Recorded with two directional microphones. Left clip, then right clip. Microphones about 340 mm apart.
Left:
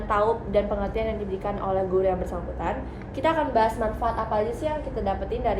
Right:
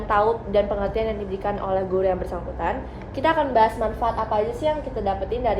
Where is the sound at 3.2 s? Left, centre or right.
Centre.